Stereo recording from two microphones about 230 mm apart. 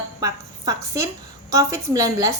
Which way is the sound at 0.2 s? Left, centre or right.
Centre.